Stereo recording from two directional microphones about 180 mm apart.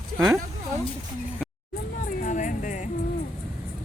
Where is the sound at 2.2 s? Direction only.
45° left (ahead or behind).